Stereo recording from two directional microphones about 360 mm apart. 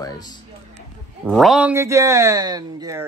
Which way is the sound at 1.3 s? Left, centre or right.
Centre.